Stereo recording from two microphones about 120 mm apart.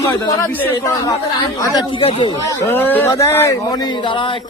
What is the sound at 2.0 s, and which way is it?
Speech, 50° left (ahead or behind).